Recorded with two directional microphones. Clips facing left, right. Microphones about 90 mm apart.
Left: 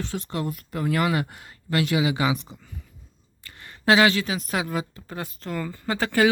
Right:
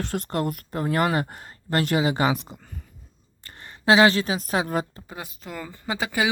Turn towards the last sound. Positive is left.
turn(degrees=-10)  # may be behind; listen again after turning